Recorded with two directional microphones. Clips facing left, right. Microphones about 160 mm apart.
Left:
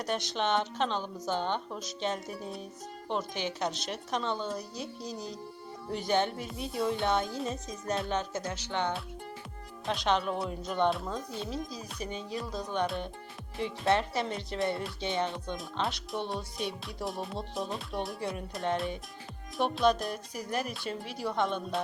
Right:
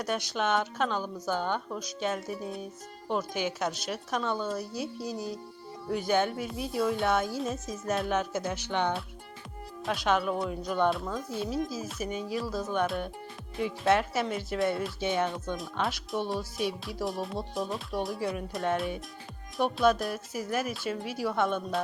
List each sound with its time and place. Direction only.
0.0 s a woman's voice: centre (ahead or behind)
1.2 s a woman's voice: 25° left (ahead or behind)
1.7 s a woman's voice: centre (ahead or behind)
9.8 s a woman's voice: centre (ahead or behind)